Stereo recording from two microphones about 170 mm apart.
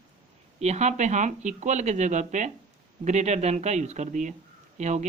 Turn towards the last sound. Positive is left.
turn(degrees=-45)  # may be behind; listen again after turning